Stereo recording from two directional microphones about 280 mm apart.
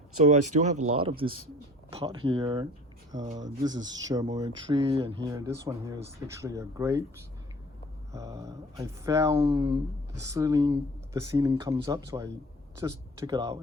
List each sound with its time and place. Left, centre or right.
0.4 s speech: right
0.8 s speech: right
1.0 s speech: centre
8.1 s speech: centre